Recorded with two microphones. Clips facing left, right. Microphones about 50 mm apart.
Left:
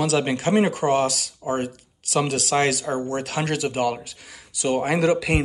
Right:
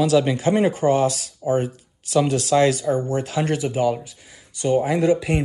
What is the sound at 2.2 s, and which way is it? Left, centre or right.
Speech, left.